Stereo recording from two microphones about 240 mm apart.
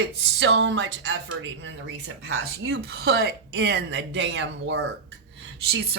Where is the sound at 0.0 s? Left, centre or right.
Right.